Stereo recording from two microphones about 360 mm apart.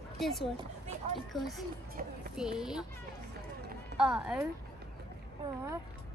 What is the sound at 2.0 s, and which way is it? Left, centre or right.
Speech, right.